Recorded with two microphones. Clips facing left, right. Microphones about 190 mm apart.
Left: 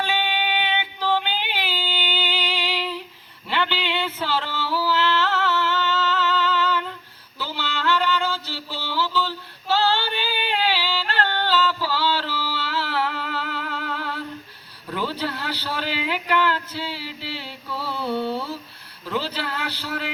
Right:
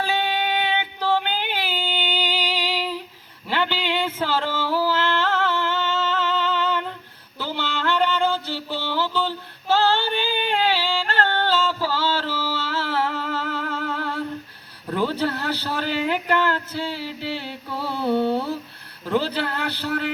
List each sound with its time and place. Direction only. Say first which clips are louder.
0.0 s female singing: right 2 dB; 40° right (ahead or behind)
3.8 s music: right 2 dB; 15° right (ahead or behind)
4.2 s a sound: right 2 dB; 50° right (ahead or behind)
5.8 s music: even; 50° right (ahead or behind)
6.4 s female singing: even; 55° right (ahead or behind)
7.3 s a sound: right 2 dB; 55° right (ahead or behind)
8.2 s female singing: right 5 dB; 55° right (ahead or behind)
10.5 s yodeling: right 1 dB; 50° right (ahead or behind)
14.8 s a sound: right 4 dB; 50° right (ahead or behind)
19.1 s speech: right 4 dB; 50° right (ahead or behind)